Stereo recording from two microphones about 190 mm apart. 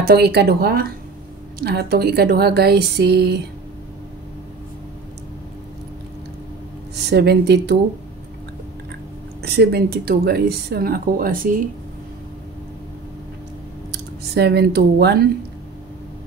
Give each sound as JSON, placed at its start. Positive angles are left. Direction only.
{"t": 0.0, "sound": "speech", "side_deg": -55}
{"t": 7.1, "sound": "speech", "side_deg": -60}
{"t": 9.4, "sound": "speech", "side_deg": -60}
{"t": 13.9, "sound": "speech", "side_deg": -60}